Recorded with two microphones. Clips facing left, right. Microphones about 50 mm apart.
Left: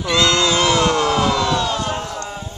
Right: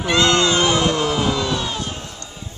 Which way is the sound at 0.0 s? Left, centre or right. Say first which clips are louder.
Even; right.